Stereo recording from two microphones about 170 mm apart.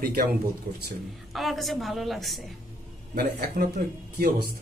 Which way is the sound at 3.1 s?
60° right (ahead or behind).